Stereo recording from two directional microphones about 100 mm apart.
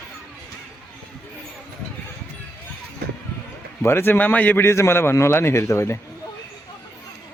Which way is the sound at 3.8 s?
25° left (ahead or behind).